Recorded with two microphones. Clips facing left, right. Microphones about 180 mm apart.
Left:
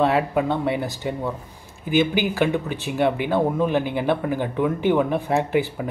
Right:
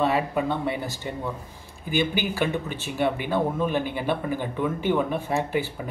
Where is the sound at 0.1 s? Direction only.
15° left (ahead or behind).